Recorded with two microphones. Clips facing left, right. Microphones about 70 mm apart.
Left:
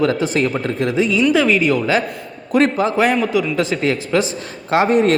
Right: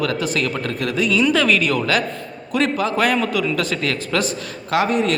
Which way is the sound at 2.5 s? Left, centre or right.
Left.